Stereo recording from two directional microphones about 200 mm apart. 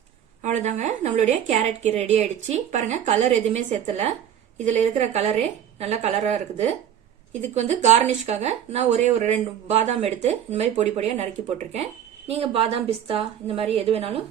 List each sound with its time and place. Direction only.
0.4 s a woman's voice: 35° right (ahead or behind)